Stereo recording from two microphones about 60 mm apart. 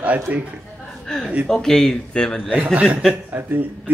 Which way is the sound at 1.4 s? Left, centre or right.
Centre.